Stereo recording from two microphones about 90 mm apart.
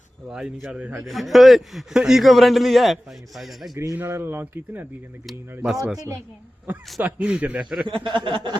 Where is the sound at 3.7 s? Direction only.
35° right (ahead or behind).